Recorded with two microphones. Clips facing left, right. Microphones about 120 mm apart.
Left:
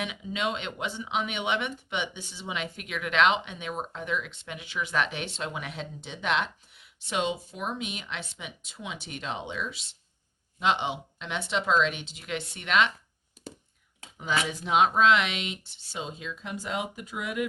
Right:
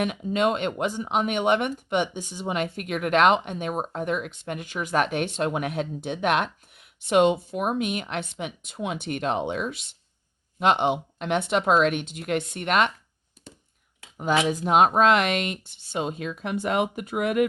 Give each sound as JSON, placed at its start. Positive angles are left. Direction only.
{"t": 0.0, "sound": "speech", "side_deg": -50}
{"t": 14.2, "sound": "speech", "side_deg": -50}